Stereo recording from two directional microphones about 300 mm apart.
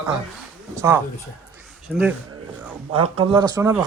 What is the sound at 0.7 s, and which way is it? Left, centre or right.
A man's voice, centre.